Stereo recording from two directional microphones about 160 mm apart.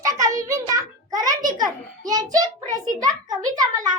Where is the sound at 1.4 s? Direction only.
55° right (ahead or behind).